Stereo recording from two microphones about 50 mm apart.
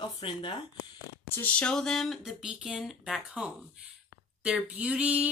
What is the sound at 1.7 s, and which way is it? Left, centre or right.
Speech, centre.